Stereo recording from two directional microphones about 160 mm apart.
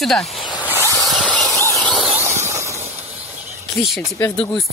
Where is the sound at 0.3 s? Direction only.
30° left (ahead or behind).